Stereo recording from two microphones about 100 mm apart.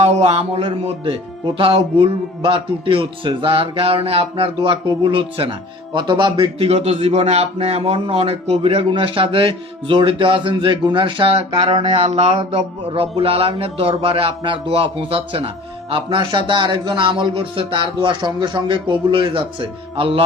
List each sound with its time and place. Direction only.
0.0 s speech: 90° right
1.0 s speech: 60° right (ahead or behind)
6.6 s a man's voice: 90° right; by 16.0 s 65° right (ahead or behind)
16.0 s speech: 55° right (ahead or behind)